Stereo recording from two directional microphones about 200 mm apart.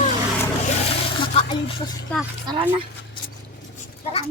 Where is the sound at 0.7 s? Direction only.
30° left (ahead or behind).